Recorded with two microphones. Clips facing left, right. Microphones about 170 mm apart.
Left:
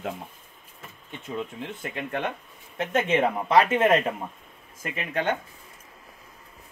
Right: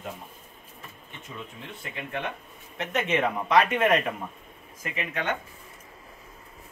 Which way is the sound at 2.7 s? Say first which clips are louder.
Left 3 dB; 30° left (ahead or behind).